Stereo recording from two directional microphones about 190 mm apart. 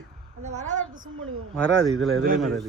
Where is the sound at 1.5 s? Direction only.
5° left (ahead or behind).